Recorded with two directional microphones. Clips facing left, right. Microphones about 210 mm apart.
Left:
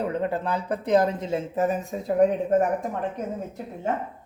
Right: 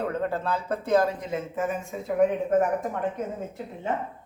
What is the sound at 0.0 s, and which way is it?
Speech, 15° left (ahead or behind).